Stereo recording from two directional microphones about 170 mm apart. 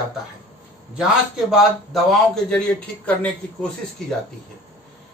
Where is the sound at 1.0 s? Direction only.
Centre (ahead or behind).